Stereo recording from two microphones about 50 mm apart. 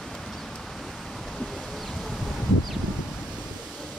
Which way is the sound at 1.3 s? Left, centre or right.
Centre.